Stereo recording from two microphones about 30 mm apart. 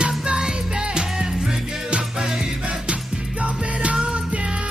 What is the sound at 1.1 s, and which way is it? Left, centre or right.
Music, centre.